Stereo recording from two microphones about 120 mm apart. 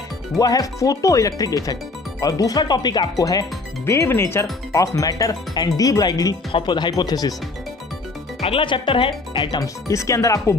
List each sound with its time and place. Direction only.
0.4 s speech: 30° left (ahead or behind)
8.4 s speech: 50° left (ahead or behind)
9.8 s speech: 25° left (ahead or behind)